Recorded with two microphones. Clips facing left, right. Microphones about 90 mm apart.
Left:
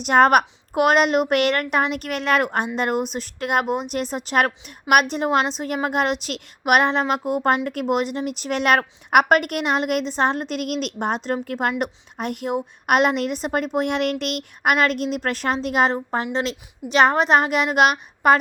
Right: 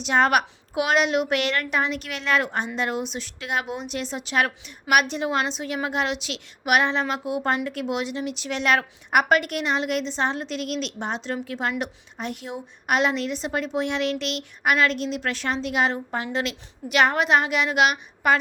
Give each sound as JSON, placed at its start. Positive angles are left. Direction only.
{"t": 0.0, "sound": "a woman's voice", "side_deg": 50}